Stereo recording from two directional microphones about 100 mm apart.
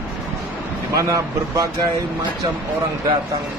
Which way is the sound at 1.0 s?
35° right (ahead or behind).